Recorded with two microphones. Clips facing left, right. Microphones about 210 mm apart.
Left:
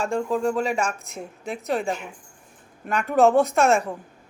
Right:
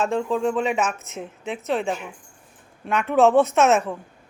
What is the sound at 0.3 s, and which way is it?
Speech, 10° left (ahead or behind).